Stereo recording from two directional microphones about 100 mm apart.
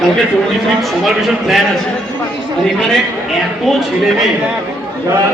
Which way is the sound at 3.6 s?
Centre (ahead or behind).